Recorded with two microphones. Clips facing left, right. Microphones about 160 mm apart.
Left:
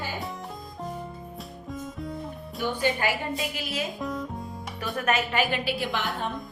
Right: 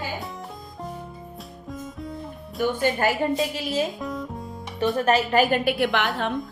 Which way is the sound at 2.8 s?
45° right (ahead or behind).